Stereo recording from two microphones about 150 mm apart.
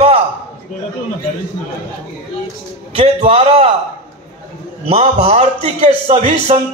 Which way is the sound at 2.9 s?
40° right (ahead or behind).